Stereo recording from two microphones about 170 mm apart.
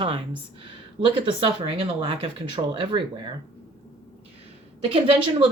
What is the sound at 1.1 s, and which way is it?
Speech, 30° right (ahead or behind).